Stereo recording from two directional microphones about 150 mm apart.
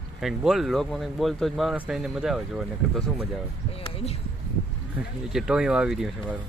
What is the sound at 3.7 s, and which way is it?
Speech, 40° left (ahead or behind).